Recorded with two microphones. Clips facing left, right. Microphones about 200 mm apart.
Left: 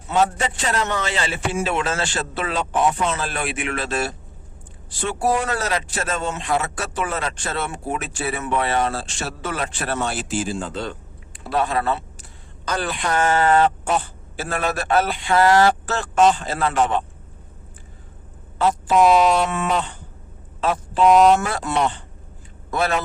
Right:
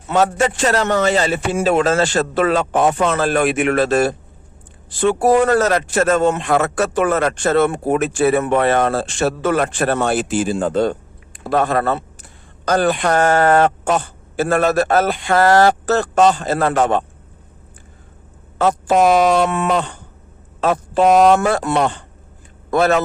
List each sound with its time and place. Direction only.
0.1 s a man's voice: 70° right (ahead or behind)
0.5 s a man's voice: 85° right
0.9 s a man's voice: 45° right (ahead or behind)
19.0 s a man's voice: 50° right (ahead or behind)